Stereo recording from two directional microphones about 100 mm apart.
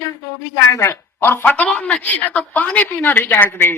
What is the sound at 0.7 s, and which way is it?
A woman's voice, 30° left (ahead or behind).